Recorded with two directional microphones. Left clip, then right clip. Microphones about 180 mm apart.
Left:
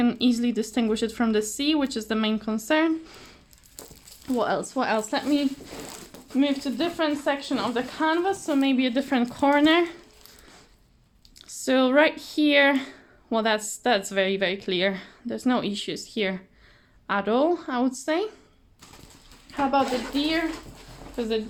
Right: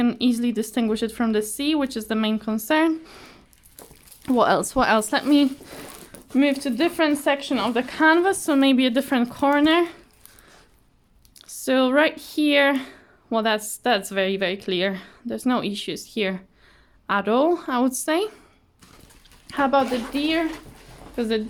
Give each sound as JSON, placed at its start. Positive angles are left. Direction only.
{"t": 0.0, "sound": "speech", "side_deg": -20}
{"t": 4.3, "sound": "a woman's voice", "side_deg": -40}
{"t": 11.3, "sound": "a woman's voice", "side_deg": -15}
{"t": 19.5, "sound": "speech", "side_deg": -60}